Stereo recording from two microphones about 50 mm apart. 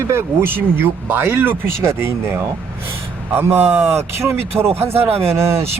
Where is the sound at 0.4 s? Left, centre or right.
Right.